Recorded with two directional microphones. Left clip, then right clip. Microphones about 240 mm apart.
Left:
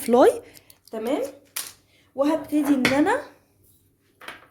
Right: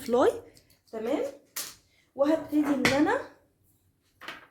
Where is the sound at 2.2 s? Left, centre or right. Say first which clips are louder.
Left 3 dB; left.